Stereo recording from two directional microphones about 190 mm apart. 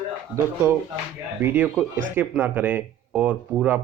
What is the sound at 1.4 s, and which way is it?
Speech, 10° right (ahead or behind).